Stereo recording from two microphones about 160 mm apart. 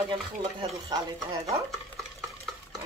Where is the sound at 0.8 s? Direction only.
25° right (ahead or behind).